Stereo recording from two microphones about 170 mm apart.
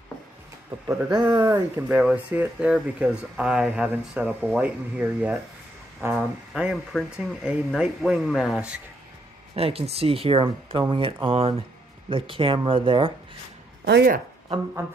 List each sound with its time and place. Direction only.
0.8 s speech: 25° right (ahead or behind)
1.8 s speech: 10° right (ahead or behind)
9.6 s speech: 35° right (ahead or behind)
13.8 s speech: 70° right (ahead or behind)